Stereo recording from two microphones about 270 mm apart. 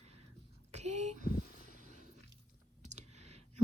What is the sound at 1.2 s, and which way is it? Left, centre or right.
Vehicle, left.